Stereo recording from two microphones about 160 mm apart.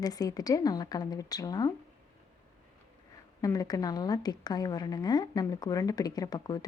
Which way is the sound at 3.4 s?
20° left (ahead or behind).